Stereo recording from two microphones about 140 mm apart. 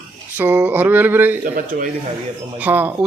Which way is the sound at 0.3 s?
10° right (ahead or behind).